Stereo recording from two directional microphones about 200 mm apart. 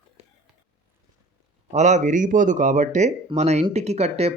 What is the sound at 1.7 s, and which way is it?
Speech, 35° right (ahead or behind).